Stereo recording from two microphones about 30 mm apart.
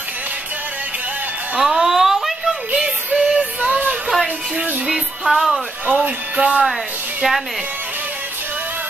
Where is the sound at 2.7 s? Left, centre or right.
Right.